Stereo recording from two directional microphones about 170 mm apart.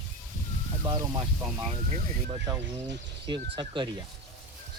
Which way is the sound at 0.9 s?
30° right (ahead or behind).